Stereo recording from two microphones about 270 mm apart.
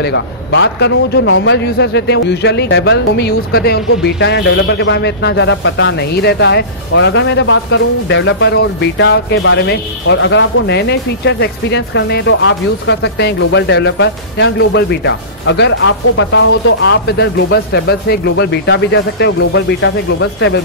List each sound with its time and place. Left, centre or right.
0.0 s a man's voice: left